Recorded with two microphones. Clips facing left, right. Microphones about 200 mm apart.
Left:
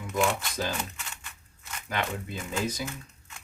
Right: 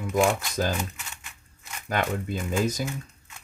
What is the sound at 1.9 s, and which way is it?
Speech, 45° right (ahead or behind).